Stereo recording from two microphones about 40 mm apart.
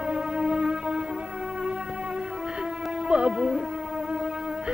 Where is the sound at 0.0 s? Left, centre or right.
Right.